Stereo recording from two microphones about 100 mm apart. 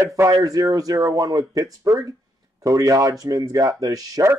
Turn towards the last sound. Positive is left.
turn(degrees=-40)  # may be behind; listen again after turning